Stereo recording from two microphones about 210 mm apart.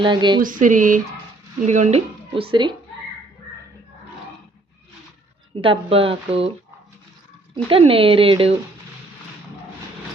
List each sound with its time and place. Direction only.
0.0 s speech: 20° right (ahead or behind)
0.4 s speech: 40° right (ahead or behind); by 2.7 s 25° right (ahead or behind)
5.5 s speech: 25° right (ahead or behind)
7.5 s speech: 25° right (ahead or behind)